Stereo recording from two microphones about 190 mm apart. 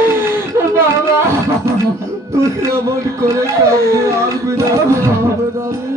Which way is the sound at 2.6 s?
15° right (ahead or behind).